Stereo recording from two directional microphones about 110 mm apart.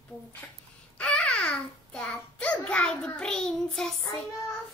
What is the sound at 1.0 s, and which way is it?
A child's voice, 10° left (ahead or behind).